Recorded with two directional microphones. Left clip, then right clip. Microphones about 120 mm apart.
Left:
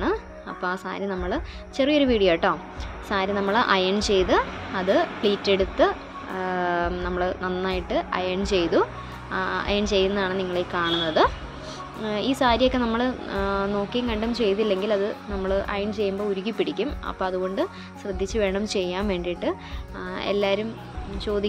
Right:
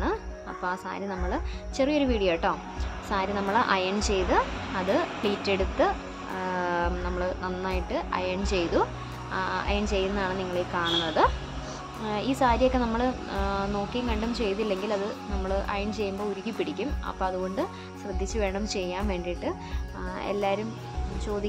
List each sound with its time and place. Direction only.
0.0 s a woman's voice: 35° left (ahead or behind)
21.3 s a woman's voice: 40° left (ahead or behind)